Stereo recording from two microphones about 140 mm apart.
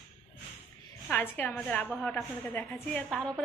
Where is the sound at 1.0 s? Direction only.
15° left (ahead or behind).